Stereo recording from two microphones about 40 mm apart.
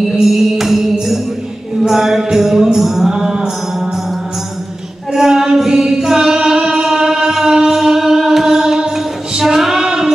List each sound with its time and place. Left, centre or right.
0.1 s music: centre
5.1 s singing: centre